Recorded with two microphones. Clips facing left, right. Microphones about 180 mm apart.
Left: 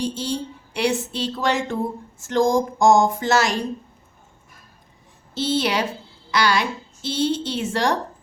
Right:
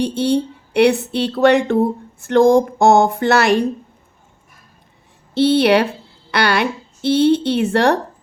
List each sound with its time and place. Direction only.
0.0 s speech: 65° right (ahead or behind)
5.3 s speech: 60° right (ahead or behind)